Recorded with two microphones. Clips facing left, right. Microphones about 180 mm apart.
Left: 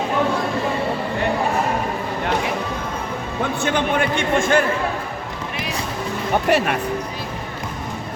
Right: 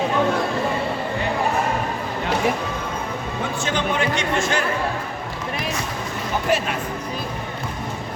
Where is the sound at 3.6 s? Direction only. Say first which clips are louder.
Left 2 dB; 55° left (ahead or behind).